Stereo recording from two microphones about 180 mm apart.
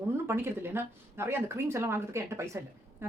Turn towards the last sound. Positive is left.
turn(degrees=-15)  # may be behind; listen again after turning